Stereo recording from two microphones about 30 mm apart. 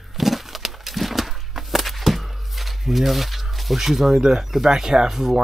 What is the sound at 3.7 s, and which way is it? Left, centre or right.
Speech, centre.